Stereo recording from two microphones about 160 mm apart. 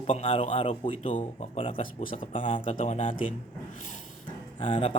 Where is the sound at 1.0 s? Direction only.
50° left (ahead or behind); by 1.9 s 35° left (ahead or behind).